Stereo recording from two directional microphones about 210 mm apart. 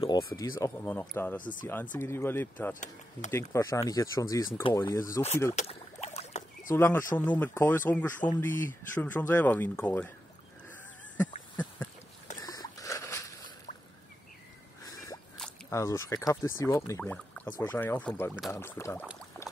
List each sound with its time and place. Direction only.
0.0 s speech: 20° left (ahead or behind)
1.4 s speech: 40° left (ahead or behind)
2.0 s speech: 10° left (ahead or behind)
2.7 s speech: 35° left (ahead or behind)
3.3 s speech: 15° left (ahead or behind)
5.5 s rowboat: 30° left (ahead or behind)
6.7 s speech: 10° left (ahead or behind)
12.4 s a sound: 15° left (ahead or behind)
15.7 s speech: 15° left (ahead or behind)
19.4 s boat: 15° left (ahead or behind)